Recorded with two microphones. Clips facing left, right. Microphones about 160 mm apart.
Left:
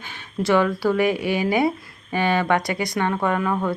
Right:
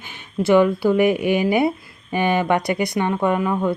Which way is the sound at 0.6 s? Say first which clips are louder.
Right 4 dB; 15° right (ahead or behind).